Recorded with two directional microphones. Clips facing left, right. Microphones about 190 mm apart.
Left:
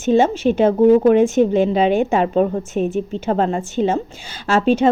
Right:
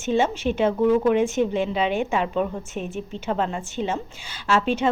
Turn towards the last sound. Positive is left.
turn(degrees=40)  # may be behind; listen again after turning